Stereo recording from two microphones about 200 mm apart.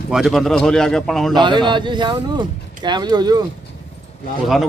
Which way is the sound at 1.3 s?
25° right (ahead or behind).